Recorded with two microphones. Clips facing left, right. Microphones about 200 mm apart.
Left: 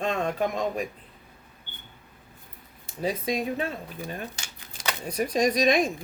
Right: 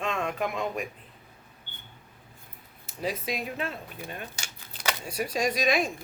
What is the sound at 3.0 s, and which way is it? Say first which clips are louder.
Speech: left 4 dB; 30° left (ahead or behind).